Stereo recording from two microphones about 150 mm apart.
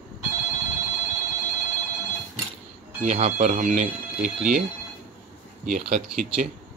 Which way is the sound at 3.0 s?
50° right (ahead or behind).